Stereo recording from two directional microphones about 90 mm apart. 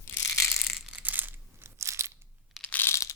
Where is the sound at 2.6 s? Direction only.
15° left (ahead or behind).